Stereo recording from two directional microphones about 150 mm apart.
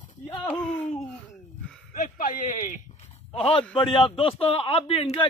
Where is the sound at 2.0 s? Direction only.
60° left (ahead or behind).